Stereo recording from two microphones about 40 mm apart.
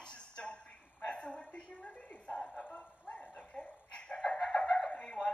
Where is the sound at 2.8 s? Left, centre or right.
Left.